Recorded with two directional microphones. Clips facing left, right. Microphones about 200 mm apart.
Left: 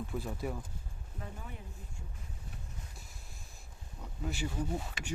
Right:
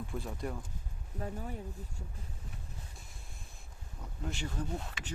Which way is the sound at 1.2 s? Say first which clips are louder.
Right 7 dB; 40° right (ahead or behind).